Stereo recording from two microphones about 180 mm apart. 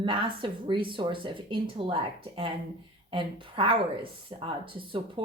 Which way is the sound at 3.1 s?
30° right (ahead or behind).